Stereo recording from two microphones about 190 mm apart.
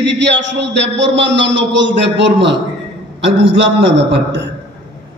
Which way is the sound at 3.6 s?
65° right (ahead or behind).